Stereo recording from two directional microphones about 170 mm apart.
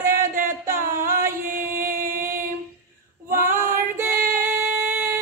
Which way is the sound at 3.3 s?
15° right (ahead or behind).